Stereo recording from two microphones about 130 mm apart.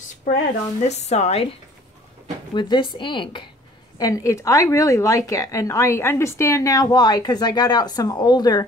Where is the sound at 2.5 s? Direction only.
35° left (ahead or behind).